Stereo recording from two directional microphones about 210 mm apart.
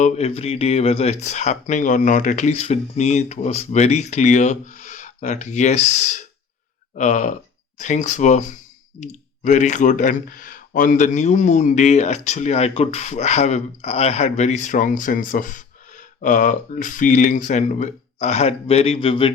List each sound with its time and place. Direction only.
0.0 s speech: 30° left (ahead or behind)